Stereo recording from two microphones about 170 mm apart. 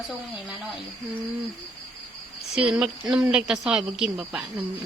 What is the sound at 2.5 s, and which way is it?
Speech, 5° right (ahead or behind).